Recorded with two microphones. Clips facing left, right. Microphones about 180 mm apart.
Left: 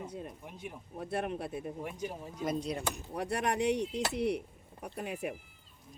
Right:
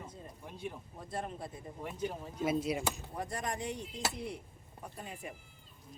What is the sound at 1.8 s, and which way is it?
Speech, 10° left (ahead or behind).